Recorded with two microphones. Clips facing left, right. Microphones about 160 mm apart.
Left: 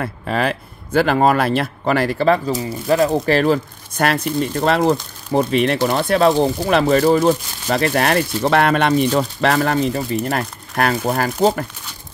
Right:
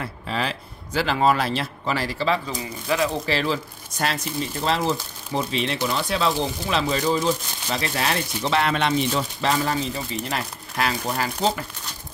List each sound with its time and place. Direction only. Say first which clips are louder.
0.0 s speech: left 7 dB; 55° left (ahead or behind)